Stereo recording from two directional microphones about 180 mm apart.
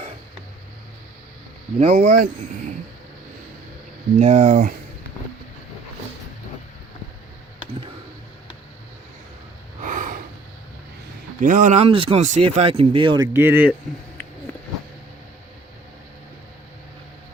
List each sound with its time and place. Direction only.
1.8 s speech: 45° right (ahead or behind)
4.2 s speech: 40° right (ahead or behind)
9.8 s snort: 45° right (ahead or behind)
11.3 s speech: 45° right (ahead or behind); by 13.7 s 10° right (ahead or behind)